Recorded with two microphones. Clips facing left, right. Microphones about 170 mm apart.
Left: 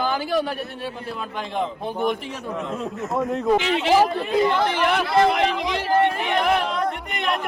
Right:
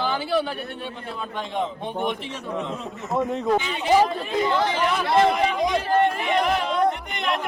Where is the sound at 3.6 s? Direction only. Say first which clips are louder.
Left 7 dB; 85° left.